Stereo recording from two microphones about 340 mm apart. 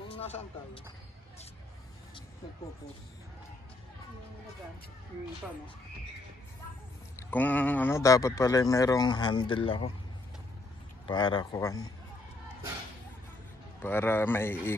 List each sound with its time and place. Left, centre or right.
0.1 s basketball bounce: centre
7.2 s speech: centre
11.1 s speech: centre
13.8 s speech: centre